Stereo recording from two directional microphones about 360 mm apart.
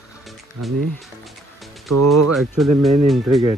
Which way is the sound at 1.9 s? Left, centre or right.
Right.